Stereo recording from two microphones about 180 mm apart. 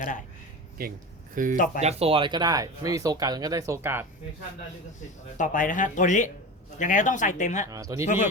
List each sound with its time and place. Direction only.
0.8 s speech: 55° right (ahead or behind)
1.5 s speech: 50° left (ahead or behind)
1.8 s speech: 35° right (ahead or behind); by 4.0 s 10° right (ahead or behind)
5.4 s speech: 45° left (ahead or behind)
7.7 s speech: 20° right (ahead or behind)
8.0 s speech: 45° left (ahead or behind)